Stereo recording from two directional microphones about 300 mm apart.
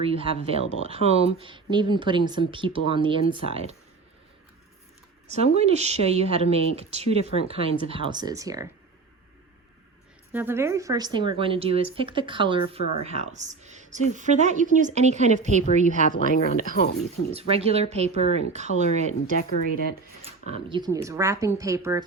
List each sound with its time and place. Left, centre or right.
0.0 s a woman's voice: centre
5.3 s a woman's voice: right
10.3 s a woman's voice: centre; by 16.0 s right
16.3 s speech: left
17.3 s a woman's voice: centre
19.4 s speech: left
20.2 s speech: centre